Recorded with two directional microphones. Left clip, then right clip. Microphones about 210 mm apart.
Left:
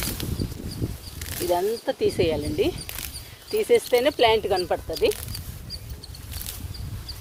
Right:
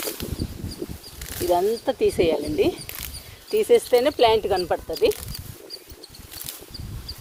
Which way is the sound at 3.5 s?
20° right (ahead or behind).